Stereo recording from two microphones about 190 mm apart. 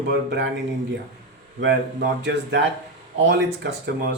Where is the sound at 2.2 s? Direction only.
65° right (ahead or behind).